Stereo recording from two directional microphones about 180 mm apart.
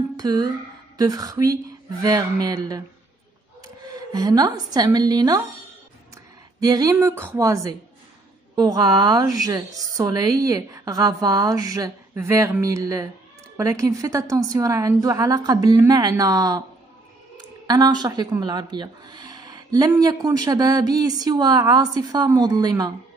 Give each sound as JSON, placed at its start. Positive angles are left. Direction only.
{"t": 0.2, "sound": "a woman's voice", "side_deg": -20}
{"t": 6.6, "sound": "a woman's voice", "side_deg": -20}
{"t": 17.6, "sound": "speech", "side_deg": -20}